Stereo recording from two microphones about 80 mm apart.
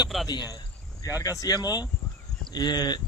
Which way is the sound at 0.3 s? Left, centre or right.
Left.